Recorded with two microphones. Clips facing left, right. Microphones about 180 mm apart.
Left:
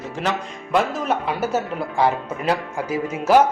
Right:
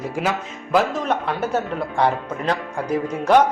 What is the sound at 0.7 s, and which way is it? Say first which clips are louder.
Speech: right 1 dB; 5° left (ahead or behind).